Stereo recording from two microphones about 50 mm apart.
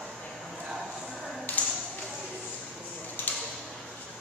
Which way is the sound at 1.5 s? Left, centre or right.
Left.